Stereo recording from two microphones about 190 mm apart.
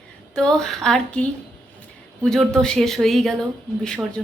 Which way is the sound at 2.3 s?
5° left (ahead or behind).